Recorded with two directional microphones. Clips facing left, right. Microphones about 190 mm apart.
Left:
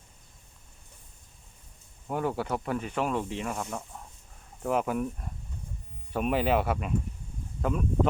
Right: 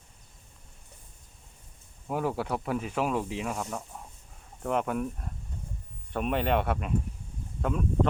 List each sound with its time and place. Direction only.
2.0 s speech: centre (ahead or behind)